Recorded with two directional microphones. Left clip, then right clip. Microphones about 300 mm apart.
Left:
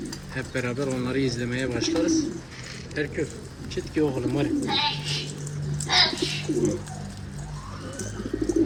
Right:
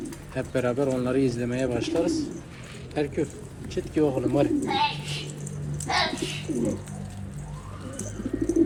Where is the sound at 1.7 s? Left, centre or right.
Right.